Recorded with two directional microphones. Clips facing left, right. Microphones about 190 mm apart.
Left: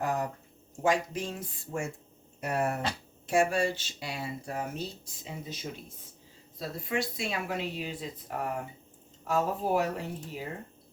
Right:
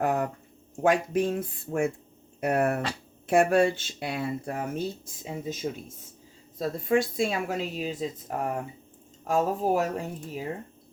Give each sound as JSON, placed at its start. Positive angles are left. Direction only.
{"t": 0.0, "sound": "a sound", "side_deg": -55}
{"t": 0.8, "sound": "speech", "side_deg": -55}
{"t": 6.6, "sound": "speech", "side_deg": -50}